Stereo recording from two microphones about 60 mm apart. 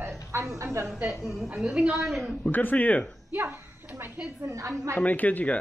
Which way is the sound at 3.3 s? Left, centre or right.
Right.